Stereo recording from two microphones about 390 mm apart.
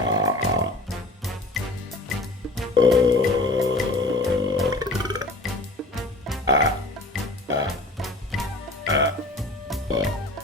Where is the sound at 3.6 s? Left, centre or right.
Centre.